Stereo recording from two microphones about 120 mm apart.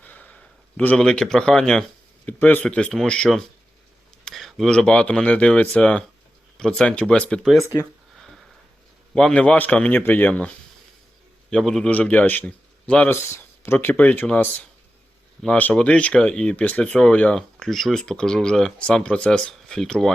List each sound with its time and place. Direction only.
0.0 s a sound: 15° left (ahead or behind)
2.2 s speech: 15° left (ahead or behind)
8.1 s sniff: 5° left (ahead or behind)
9.1 s speech: 5° left (ahead or behind)
11.5 s speech: 5° left (ahead or behind)
13.2 s a sound: 20° left (ahead or behind)
13.7 s speech: 15° left (ahead or behind)